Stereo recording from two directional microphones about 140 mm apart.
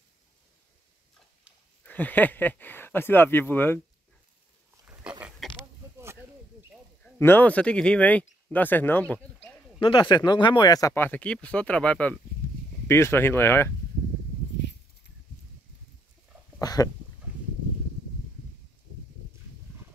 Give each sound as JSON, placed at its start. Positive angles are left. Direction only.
{"t": 1.9, "sound": "speech", "side_deg": 10}
{"t": 5.4, "sound": "pig", "side_deg": 0}
{"t": 7.2, "sound": "speech", "side_deg": 15}
{"t": 9.1, "sound": "a sound", "side_deg": 10}
{"t": 9.8, "sound": "speech", "side_deg": 35}
{"t": 16.5, "sound": "speech", "side_deg": 25}